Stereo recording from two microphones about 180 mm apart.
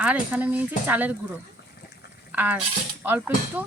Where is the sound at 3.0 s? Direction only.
10° right (ahead or behind).